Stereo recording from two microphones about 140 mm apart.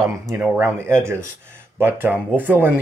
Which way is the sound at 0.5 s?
15° right (ahead or behind).